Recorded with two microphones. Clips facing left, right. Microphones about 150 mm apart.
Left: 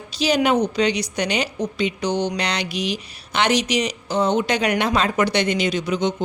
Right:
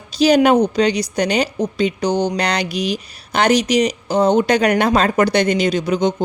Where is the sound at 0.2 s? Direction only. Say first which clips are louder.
Right 6 dB; 45° right (ahead or behind).